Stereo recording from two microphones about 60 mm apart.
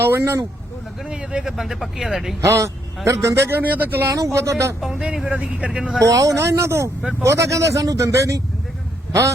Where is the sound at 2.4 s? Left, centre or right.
Right.